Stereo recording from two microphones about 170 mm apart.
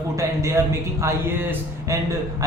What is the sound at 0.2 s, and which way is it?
A man's voice, 20° right (ahead or behind).